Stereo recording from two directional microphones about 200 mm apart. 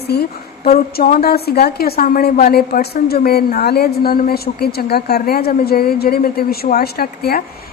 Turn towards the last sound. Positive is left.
turn(degrees=50)  # may be behind; listen again after turning